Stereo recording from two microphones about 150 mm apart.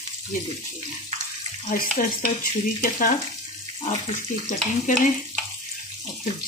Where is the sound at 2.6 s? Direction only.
65° left (ahead or behind).